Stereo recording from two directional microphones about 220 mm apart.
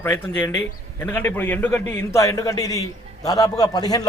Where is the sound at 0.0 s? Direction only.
10° left (ahead or behind).